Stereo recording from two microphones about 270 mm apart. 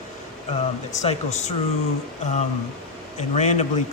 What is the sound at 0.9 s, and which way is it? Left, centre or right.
Speech, left.